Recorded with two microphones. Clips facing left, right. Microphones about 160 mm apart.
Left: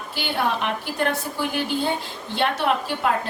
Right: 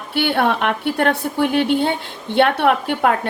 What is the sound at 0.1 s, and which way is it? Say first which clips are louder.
A woman's voice: right 7 dB; 65° right (ahead or behind).